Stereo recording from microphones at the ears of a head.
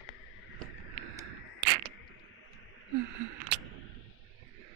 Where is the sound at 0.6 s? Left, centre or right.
Right.